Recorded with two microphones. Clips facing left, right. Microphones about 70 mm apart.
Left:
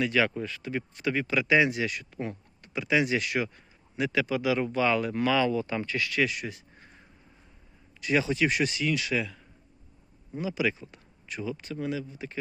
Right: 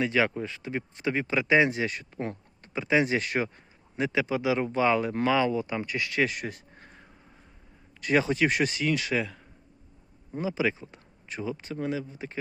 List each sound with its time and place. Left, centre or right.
0.0 s speech: right
6.2 s a sound: right
8.0 s speech: right